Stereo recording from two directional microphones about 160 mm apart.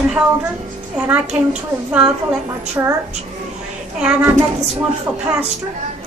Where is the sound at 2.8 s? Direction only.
15° right (ahead or behind).